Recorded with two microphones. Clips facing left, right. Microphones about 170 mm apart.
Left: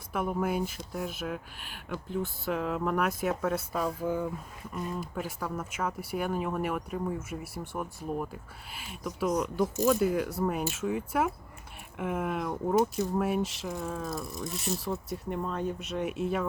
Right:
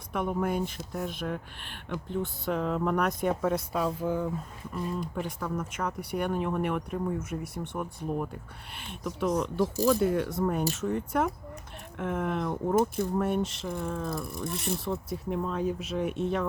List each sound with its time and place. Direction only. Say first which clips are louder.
0.1 s speech: right 1 dB; 5° left (ahead or behind)
14.3 s speech: right 2 dB; 55° right (ahead or behind)
14.8 s speech: right 2 dB; centre (ahead or behind)